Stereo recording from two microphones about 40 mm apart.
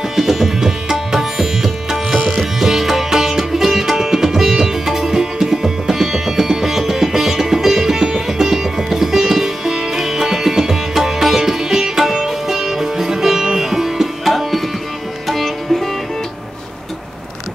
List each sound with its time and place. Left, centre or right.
0.1 s music: centre
2.1 s music: right
2.6 s music: centre